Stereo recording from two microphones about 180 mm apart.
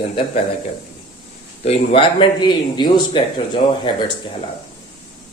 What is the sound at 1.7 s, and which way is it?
Speech, 35° left (ahead or behind).